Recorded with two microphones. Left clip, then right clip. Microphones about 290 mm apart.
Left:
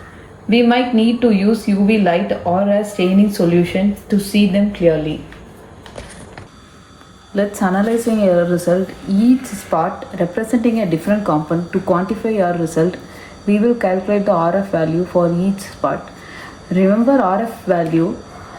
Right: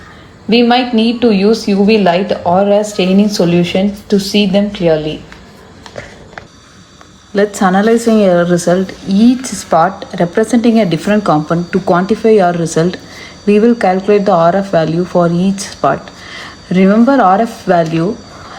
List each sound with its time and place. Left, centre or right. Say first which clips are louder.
0.5 s a woman's voice: right 4 dB; centre
7.3 s speech: right 6 dB; right